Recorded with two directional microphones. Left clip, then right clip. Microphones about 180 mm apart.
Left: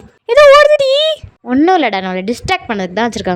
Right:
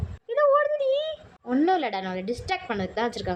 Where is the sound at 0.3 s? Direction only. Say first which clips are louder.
Left 16 dB; 85° left.